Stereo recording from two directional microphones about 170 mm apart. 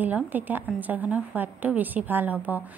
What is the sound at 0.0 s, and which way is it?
A woman's voice, 10° right (ahead or behind).